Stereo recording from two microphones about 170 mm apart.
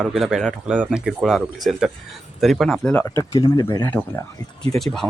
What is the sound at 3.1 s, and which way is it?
Speech, 20° left (ahead or behind).